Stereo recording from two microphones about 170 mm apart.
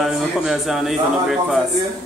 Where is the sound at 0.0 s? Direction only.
Centre (ahead or behind).